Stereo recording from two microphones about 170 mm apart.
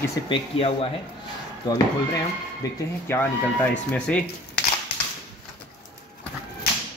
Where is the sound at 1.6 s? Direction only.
20° left (ahead or behind).